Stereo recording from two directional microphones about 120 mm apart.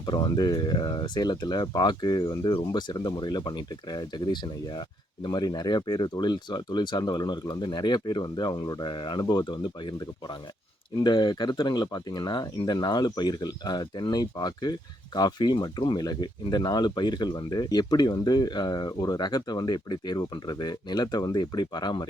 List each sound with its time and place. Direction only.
0.0 s speech: 35° left (ahead or behind)